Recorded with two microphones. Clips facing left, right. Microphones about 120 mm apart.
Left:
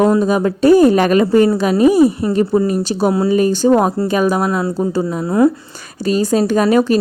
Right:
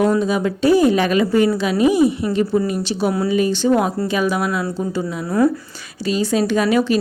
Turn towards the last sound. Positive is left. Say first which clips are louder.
# left 4 dB
turn(degrees=45)  # may be behind; listen again after turning